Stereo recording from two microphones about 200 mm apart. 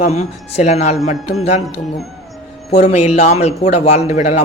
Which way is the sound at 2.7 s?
35° left (ahead or behind).